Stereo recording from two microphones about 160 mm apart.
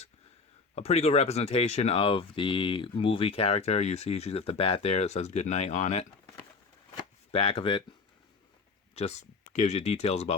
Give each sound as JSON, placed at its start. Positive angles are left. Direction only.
{"t": 0.8, "sound": "speech", "side_deg": 40}
{"t": 6.9, "sound": "a sound", "side_deg": 35}
{"t": 9.0, "sound": "speech", "side_deg": 45}